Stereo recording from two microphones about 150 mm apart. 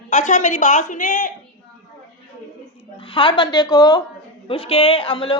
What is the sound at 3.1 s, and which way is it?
Speech, 35° left (ahead or behind).